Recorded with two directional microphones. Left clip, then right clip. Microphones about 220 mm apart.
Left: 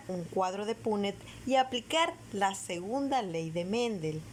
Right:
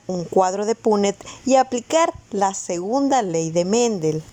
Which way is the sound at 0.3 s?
25° right (ahead or behind).